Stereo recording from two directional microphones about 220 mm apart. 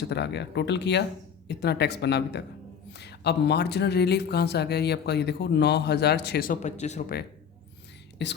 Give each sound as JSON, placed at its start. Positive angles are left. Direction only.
{"t": 0.0, "sound": "speech", "side_deg": 50}
{"t": 8.2, "sound": "speech", "side_deg": 50}